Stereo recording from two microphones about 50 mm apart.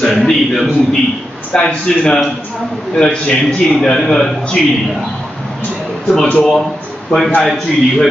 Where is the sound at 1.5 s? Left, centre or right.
Left; by 4.7 s centre.